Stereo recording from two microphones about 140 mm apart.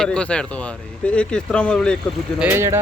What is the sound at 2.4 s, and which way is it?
Speech, 15° right (ahead or behind).